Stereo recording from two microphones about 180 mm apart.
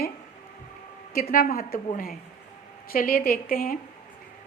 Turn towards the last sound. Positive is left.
turn(degrees=50)  # may be behind; listen again after turning